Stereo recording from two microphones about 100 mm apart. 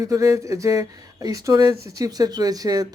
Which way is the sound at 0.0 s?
35° right (ahead or behind).